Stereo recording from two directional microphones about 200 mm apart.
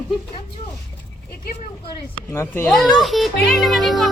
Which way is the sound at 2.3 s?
10° left (ahead or behind).